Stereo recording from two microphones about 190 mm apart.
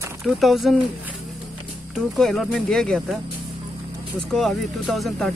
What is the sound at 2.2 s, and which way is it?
Speech, centre (ahead or behind).